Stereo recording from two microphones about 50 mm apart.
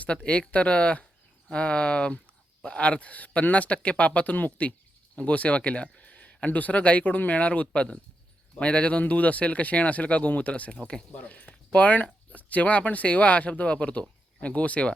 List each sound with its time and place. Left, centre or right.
0.0 s speech: left